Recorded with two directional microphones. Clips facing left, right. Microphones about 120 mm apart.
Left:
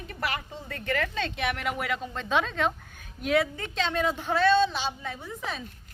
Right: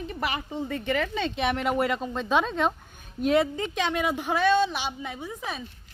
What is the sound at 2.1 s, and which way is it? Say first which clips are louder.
A woman's voice: even; 15° right (ahead or behind).